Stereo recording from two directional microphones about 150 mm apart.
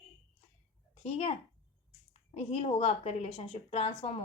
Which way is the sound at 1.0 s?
40° left (ahead or behind).